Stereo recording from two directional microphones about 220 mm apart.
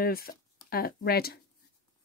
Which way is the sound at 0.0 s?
40° left (ahead or behind).